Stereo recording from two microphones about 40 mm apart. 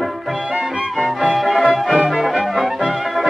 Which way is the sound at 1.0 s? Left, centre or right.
Centre.